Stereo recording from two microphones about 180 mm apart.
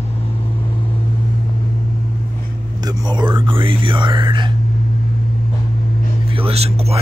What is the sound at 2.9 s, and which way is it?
Whispering, 25° right (ahead or behind).